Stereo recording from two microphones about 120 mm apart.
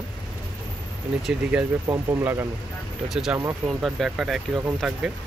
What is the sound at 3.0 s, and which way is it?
Speech, 5° right (ahead or behind).